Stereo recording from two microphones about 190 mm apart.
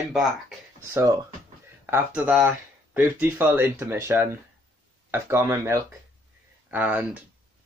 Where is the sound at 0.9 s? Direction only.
15° right (ahead or behind).